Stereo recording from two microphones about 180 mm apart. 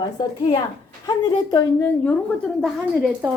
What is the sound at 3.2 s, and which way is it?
Speech, 10° right (ahead or behind).